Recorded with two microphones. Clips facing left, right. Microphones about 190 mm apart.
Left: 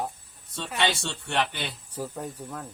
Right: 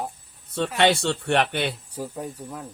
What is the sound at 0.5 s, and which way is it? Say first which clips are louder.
Snicker: right 7 dB; 60° right (ahead or behind).